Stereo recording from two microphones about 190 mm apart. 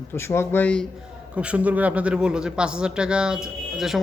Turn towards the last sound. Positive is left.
turn(degrees=0)  # may be behind; listen again after turning